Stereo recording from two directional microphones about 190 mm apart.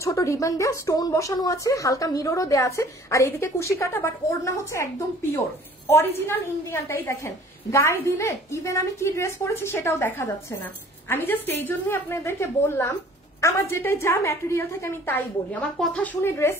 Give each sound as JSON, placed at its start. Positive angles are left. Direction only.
{"t": 0.0, "sound": "a woman's voice", "side_deg": 15}
{"t": 5.9, "sound": "a woman's voice", "side_deg": 15}